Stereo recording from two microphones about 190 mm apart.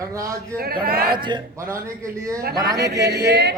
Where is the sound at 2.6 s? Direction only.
20° right (ahead or behind).